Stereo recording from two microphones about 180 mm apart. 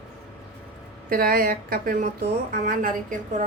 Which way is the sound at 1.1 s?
55° right (ahead or behind).